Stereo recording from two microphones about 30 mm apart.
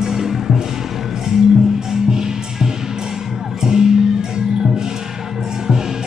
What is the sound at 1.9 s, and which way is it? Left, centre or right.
Music, centre.